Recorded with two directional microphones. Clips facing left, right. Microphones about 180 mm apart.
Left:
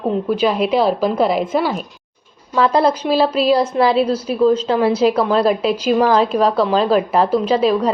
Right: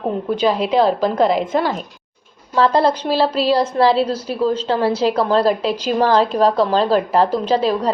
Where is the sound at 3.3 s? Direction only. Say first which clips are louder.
Left 1 dB; 15° left (ahead or behind).